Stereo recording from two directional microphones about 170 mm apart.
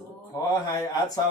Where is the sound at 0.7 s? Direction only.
20° left (ahead or behind).